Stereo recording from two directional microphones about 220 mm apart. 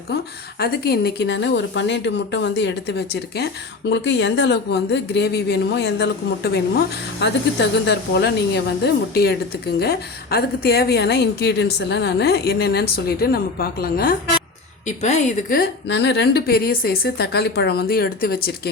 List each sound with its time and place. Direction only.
0.6 s a woman's voice: 45° left (ahead or behind)
14.8 s a woman's voice: 30° left (ahead or behind)